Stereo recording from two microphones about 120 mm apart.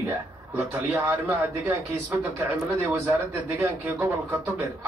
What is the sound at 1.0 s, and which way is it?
Speech, 20° right (ahead or behind).